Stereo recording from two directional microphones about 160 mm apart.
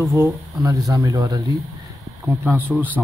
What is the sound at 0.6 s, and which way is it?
Speech, 20° right (ahead or behind).